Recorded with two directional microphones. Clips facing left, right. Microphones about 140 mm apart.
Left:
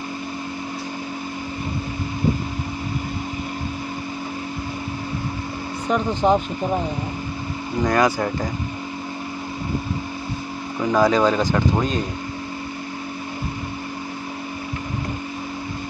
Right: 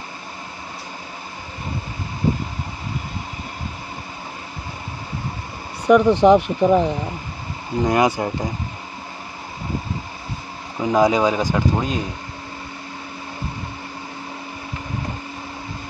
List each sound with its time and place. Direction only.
5.9 s speech: 70° right (ahead or behind)
7.8 s speech: 20° right (ahead or behind)
10.8 s speech: 20° right (ahead or behind)